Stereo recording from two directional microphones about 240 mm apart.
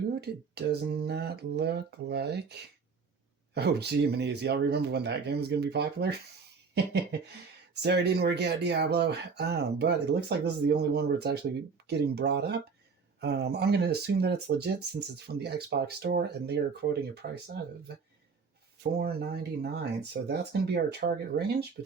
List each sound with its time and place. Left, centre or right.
0.2 s speech: right
18.8 s speech: right